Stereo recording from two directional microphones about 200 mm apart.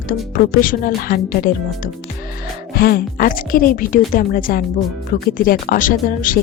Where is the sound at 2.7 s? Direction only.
50° left (ahead or behind).